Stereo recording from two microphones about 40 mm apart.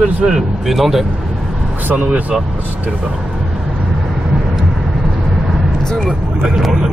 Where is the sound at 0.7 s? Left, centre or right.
Centre.